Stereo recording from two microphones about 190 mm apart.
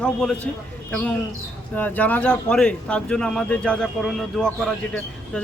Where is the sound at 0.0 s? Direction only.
5° left (ahead or behind).